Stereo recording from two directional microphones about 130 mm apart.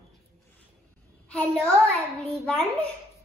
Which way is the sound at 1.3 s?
5° left (ahead or behind).